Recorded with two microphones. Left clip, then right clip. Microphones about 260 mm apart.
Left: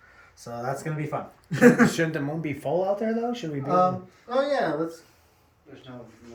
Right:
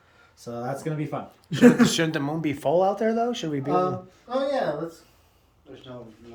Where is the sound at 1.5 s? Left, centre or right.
Centre.